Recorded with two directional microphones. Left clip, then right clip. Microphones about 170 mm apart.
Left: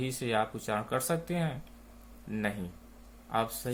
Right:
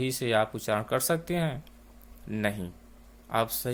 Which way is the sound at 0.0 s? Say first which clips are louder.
Right 5 dB; 60° right (ahead or behind).